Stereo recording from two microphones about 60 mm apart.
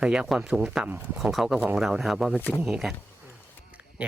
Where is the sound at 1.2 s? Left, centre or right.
Centre.